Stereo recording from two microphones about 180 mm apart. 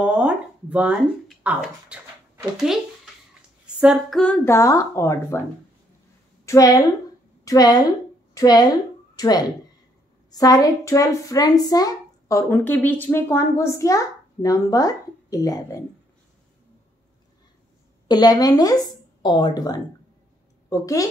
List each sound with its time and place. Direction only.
0.0 s speech: 5° right (ahead or behind)
3.8 s speech: centre (ahead or behind); by 5.4 s 15° left (ahead or behind)
6.4 s a woman's voice: 20° left (ahead or behind)
18.0 s a woman's voice: 25° left (ahead or behind)